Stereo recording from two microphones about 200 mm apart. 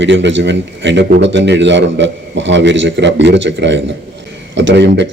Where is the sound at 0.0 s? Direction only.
65° right (ahead or behind).